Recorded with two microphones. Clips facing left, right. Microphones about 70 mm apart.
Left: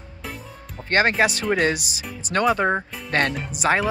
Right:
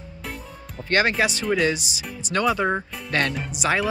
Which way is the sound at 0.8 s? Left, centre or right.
Left.